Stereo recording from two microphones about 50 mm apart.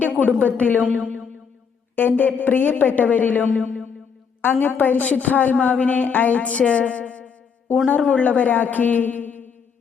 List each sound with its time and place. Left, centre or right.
0.0 s a sound: left
0.4 s a woman's voice: left
2.0 s a woman's voice: left